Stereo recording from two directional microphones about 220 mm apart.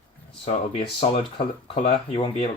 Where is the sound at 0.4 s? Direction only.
25° left (ahead or behind).